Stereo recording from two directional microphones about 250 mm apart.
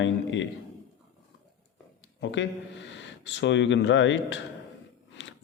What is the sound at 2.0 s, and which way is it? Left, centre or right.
Speech, left.